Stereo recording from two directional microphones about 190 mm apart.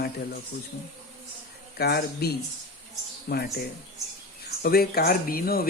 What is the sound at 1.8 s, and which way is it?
Speech, 55° left (ahead or behind).